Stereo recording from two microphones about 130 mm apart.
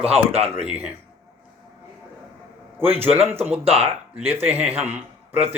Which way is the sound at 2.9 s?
15° right (ahead or behind).